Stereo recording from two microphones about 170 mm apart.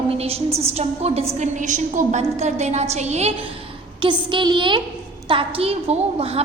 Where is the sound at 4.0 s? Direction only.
30° right (ahead or behind).